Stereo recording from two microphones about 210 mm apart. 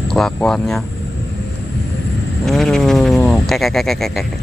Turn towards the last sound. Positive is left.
turn(degrees=0)  # may be behind; listen again after turning